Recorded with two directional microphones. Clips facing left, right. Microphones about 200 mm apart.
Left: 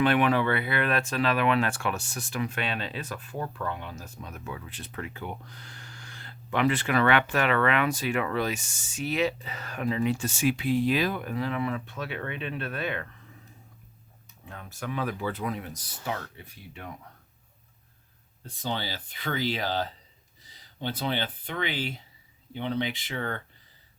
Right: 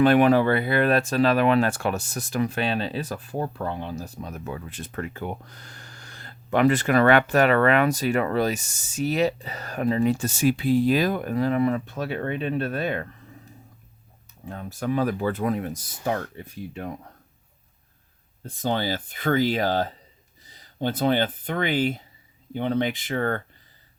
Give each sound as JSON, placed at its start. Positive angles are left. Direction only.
{"t": 0.0, "sound": "speech", "side_deg": -40}
{"t": 14.4, "sound": "speech", "side_deg": -35}
{"t": 18.4, "sound": "speech", "side_deg": -45}